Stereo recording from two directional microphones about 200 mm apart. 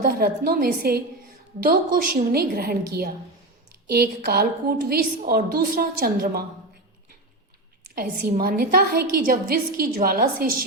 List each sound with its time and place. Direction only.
0.0 s a woman's voice: 50° right (ahead or behind)
7.9 s a woman's voice: 45° right (ahead or behind)